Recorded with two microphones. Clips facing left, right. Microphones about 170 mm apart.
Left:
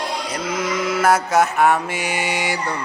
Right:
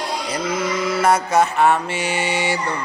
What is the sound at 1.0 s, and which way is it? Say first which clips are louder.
Mantra: even; 5° left (ahead or behind).